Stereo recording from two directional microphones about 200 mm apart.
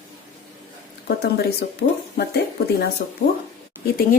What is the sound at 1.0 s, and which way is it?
Speech, 55° left (ahead or behind).